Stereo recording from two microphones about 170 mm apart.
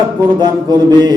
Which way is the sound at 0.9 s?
25° right (ahead or behind).